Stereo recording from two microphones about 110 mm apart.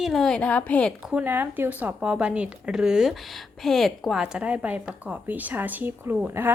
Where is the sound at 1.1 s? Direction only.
15° right (ahead or behind).